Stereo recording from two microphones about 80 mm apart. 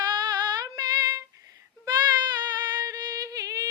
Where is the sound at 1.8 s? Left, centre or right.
Right.